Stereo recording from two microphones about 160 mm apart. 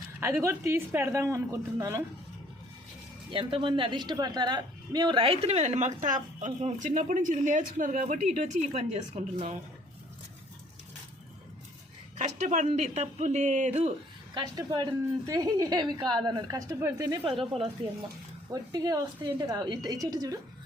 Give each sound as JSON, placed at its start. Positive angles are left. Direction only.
{"t": 0.2, "sound": "speech", "side_deg": -15}
{"t": 3.3, "sound": "a woman's voice", "side_deg": -35}
{"t": 12.1, "sound": "speech", "side_deg": -45}
{"t": 14.3, "sound": "a woman's voice", "side_deg": -25}
{"t": 18.5, "sound": "a woman's voice", "side_deg": -25}